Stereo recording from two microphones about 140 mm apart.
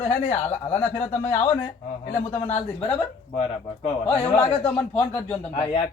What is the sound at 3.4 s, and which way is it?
Speech, 50° left (ahead or behind).